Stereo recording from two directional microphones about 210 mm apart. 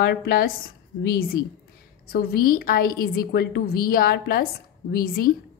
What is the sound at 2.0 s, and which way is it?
Speech, 45° left (ahead or behind).